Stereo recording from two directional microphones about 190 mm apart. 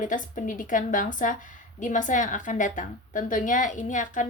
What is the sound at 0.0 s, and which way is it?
Speech, 45° left (ahead or behind).